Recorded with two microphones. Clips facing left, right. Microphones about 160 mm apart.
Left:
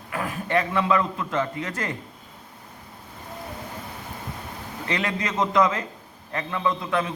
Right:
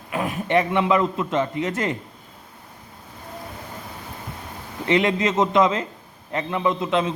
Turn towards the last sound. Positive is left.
turn(degrees=-20)  # may be behind; listen again after turning